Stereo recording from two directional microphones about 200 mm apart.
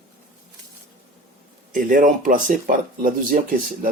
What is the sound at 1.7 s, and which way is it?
Speech, 40° right (ahead or behind).